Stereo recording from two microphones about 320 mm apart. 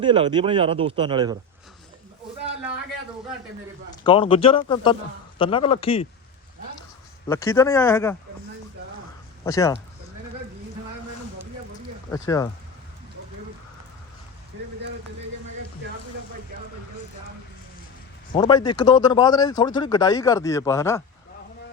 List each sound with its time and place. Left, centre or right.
0.0 s speech: centre
4.0 s speech: centre
7.3 s speech: centre
9.4 s speech: centre
12.1 s speech: centre
18.3 s speech: centre